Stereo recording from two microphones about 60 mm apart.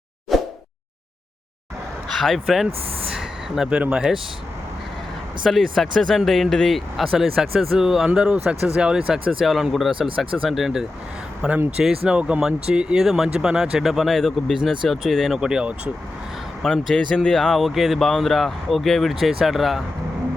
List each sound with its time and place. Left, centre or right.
0.3 s a sound: centre
2.1 s speech: centre
3.1 s a sound: centre
3.7 s speech: centre
5.4 s speech: centre
15.4 s speech: centre
16.6 s speech: centre